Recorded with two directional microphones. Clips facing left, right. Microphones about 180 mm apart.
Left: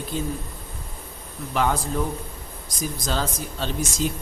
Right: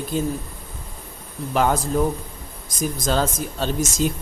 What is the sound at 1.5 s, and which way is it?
Speech, 45° right (ahead or behind).